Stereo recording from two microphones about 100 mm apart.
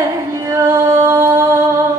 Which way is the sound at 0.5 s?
35° right (ahead or behind).